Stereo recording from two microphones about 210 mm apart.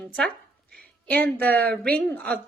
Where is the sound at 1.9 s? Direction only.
5° left (ahead or behind).